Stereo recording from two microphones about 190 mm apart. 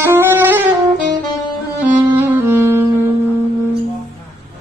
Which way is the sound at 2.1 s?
10° right (ahead or behind).